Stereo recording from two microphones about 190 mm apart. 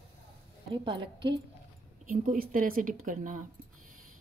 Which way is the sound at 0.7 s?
25° right (ahead or behind).